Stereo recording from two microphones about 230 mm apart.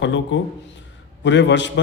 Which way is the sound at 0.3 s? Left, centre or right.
Left.